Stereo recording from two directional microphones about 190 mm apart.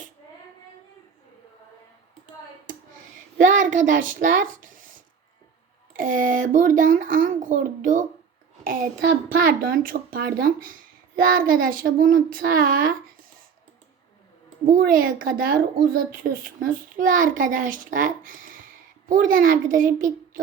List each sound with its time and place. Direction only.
3.3 s a woman's voice: 45° right (ahead or behind)
6.0 s speech: 45° right (ahead or behind)
9.3 s speech: 50° right (ahead or behind)
14.6 s speech: 50° right (ahead or behind)